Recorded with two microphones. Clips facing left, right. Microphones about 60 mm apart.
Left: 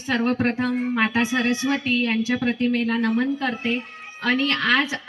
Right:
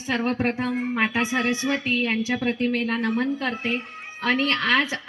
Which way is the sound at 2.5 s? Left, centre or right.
Right.